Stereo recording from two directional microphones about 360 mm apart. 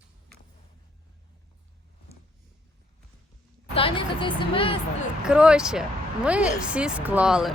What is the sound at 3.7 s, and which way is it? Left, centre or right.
A woman's voice, centre.